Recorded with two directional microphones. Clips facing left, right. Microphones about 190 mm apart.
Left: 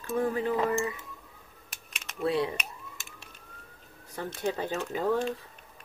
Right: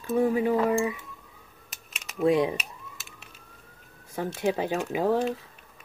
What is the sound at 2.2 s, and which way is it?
Speech, 15° right (ahead or behind).